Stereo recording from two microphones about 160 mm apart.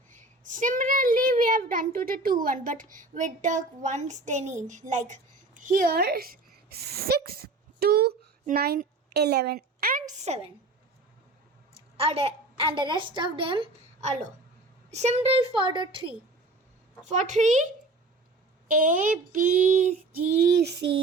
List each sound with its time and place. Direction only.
0.1 s a child's voice: 50° right (ahead or behind)
10.2 s a woman's voice: 40° right (ahead or behind)
11.9 s a woman's voice: 40° right (ahead or behind)
17.0 s a woman's voice: 50° right (ahead or behind)
19.3 s child singing: 55° right (ahead or behind)
20.4 s child singing: 90° right